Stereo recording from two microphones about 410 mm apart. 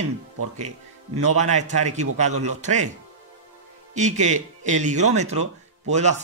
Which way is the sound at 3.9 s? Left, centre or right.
Centre.